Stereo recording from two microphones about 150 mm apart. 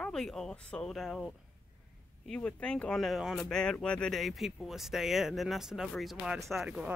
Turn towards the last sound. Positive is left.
turn(degrees=-5)  # may be behind; listen again after turning